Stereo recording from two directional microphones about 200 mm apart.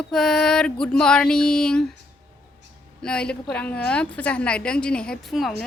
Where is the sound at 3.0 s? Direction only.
5° left (ahead or behind).